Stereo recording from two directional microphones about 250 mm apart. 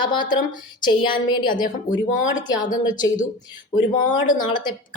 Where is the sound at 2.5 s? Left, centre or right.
Left.